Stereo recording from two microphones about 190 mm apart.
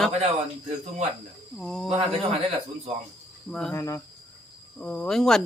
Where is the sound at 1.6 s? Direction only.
Centre (ahead or behind).